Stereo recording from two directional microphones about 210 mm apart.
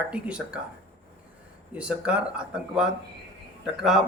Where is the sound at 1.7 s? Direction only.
5° right (ahead or behind).